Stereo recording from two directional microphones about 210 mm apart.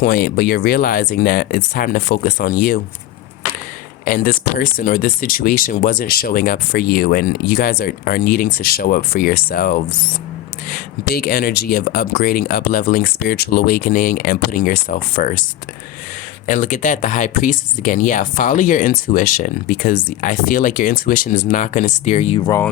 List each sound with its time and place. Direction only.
0.0 s speech: 50° left (ahead or behind)
4.0 s speech: 40° left (ahead or behind)
16.5 s speech: 35° left (ahead or behind)